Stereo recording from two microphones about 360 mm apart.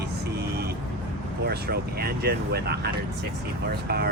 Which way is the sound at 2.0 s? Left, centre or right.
Right.